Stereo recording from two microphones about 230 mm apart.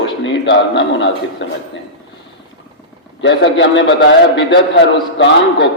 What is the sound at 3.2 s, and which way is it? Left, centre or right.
A man's voice, left.